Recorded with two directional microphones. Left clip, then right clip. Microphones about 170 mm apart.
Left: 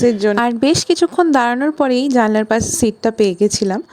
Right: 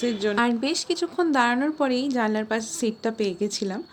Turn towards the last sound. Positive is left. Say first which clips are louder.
# left 12 dB
turn(degrees=60)  # may be behind; listen again after turning